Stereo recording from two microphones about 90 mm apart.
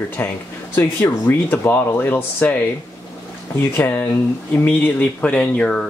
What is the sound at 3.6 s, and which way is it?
Speech, 20° left (ahead or behind).